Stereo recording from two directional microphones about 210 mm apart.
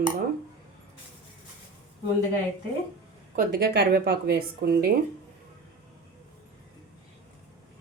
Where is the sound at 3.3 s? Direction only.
45° right (ahead or behind).